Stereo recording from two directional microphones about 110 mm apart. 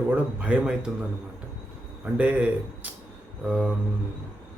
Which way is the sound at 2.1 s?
15° right (ahead or behind).